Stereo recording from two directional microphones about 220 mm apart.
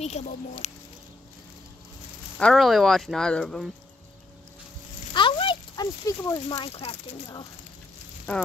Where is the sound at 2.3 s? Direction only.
Centre (ahead or behind).